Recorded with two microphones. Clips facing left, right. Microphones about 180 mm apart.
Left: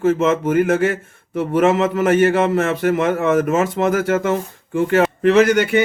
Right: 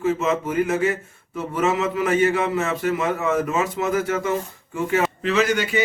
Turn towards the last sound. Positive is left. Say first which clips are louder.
# left 7 dB
turn(degrees=60)  # may be behind; listen again after turning